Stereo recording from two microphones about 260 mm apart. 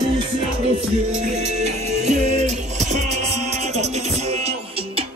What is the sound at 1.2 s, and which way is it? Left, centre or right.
Music, right.